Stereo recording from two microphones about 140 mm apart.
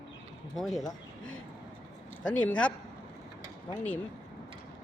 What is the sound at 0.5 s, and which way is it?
Speech, centre (ahead or behind).